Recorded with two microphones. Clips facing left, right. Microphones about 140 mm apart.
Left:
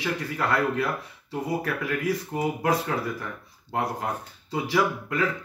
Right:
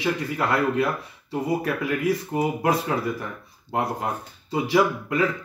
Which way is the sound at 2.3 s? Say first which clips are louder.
Right 2 dB; 15° right (ahead or behind).